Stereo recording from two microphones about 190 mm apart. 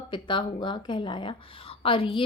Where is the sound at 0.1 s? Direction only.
25° left (ahead or behind).